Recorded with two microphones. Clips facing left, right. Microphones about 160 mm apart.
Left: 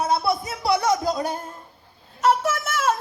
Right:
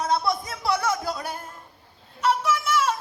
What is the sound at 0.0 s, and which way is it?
Music, 10° left (ahead or behind).